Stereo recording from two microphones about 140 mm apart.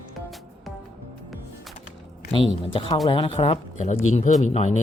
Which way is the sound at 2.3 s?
40° left (ahead or behind).